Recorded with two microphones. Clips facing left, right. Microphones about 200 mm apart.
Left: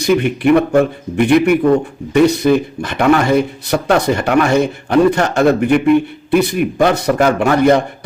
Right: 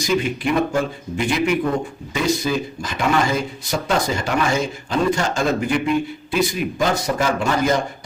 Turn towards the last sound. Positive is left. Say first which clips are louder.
# left 8 dB
turn(degrees=60)  # may be behind; listen again after turning